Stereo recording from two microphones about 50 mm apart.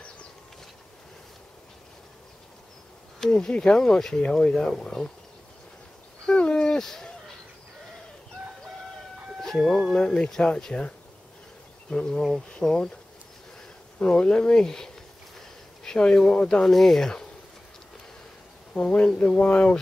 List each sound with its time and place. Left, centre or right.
3.2 s speech: centre
6.2 s a sound: centre
9.4 s speech: centre
11.9 s speech: centre
14.0 s speech: centre
18.7 s speech: left